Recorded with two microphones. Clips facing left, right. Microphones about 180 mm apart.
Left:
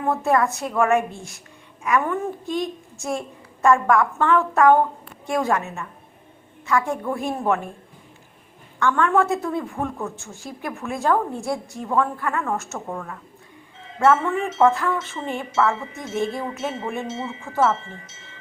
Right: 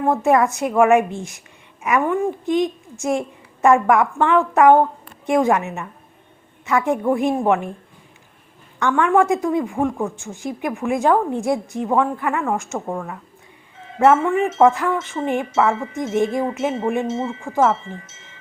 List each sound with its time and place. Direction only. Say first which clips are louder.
0.3 s a woman's voice: right 4 dB; 20° right (ahead or behind)
8.8 s a woman's voice: right 3 dB; 15° right (ahead or behind)
14.0 s a woman's voice: right 4 dB; 15° right (ahead or behind)